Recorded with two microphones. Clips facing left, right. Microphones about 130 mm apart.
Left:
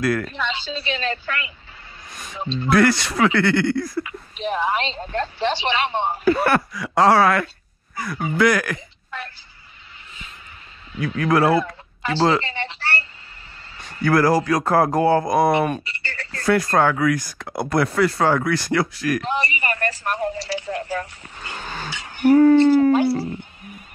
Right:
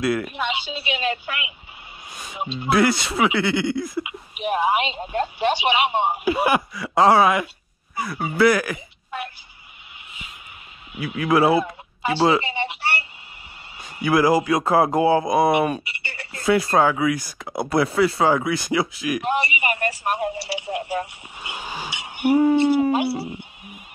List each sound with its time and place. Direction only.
0.2 s speech: 10° right (ahead or behind)
3.8 s speech: 20° right (ahead or behind); by 7.2 s 5° right (ahead or behind)
7.2 s speech: 15° right (ahead or behind)
10.9 s a woman's voice: 10° right (ahead or behind)
14.6 s speech: centre (ahead or behind)
16.1 s a sound: 15° right (ahead or behind)
16.4 s speech: 5° right (ahead or behind)
19.2 s a woman's voice: 15° right (ahead or behind)
23.2 s a sound: 10° right (ahead or behind)